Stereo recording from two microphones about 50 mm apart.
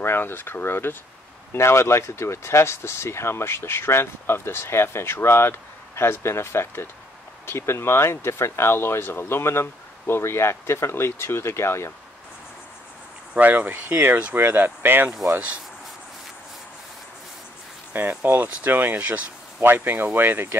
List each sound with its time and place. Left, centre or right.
0.0 s speech: left
1.5 s speech: left
13.4 s speech: right
17.9 s speech: right